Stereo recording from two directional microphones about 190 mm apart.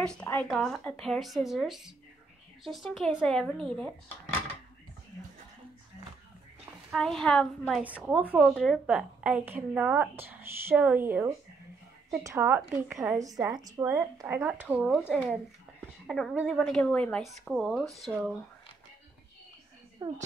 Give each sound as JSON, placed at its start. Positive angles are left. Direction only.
{"t": 0.0, "sound": "a woman's voice", "side_deg": 5}
{"t": 6.9, "sound": "a woman's voice", "side_deg": 5}
{"t": 7.8, "sound": "a woman's voice", "side_deg": -10}
{"t": 13.2, "sound": "a woman's voice", "side_deg": -20}
{"t": 20.0, "sound": "a woman's voice", "side_deg": -20}